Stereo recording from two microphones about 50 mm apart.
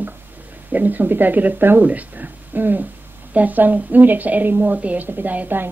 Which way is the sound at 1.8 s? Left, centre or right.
Right.